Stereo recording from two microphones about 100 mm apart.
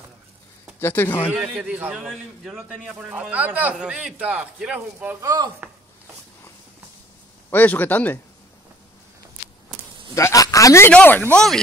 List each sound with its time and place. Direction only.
0.7 s speech: 20° left (ahead or behind)
1.3 s a man's voice: 10° right (ahead or behind)
5.2 s speech: 35° right (ahead or behind)
7.4 s a man's voice: 20° left (ahead or behind)
10.1 s a man's voice: 35° left (ahead or behind)
10.9 s a man's voice: 15° left (ahead or behind)
11.3 s a man's voice: 5° left (ahead or behind)